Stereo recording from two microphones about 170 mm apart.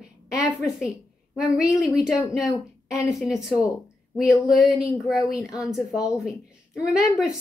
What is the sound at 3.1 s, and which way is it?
A woman's voice, centre (ahead or behind).